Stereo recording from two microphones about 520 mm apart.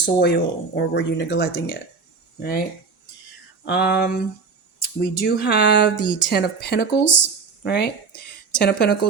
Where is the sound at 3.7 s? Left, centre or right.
Centre.